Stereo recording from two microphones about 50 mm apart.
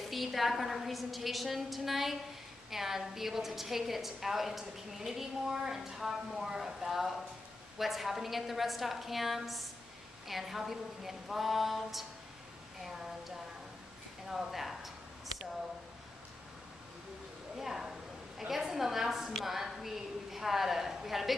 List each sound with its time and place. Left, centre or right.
0.1 s a woman's voice: centre
14.3 s speech: centre
17.6 s a sound: centre
18.4 s a woman's voice: centre